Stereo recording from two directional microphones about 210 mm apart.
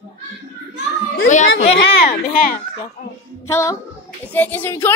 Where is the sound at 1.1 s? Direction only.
40° left (ahead or behind).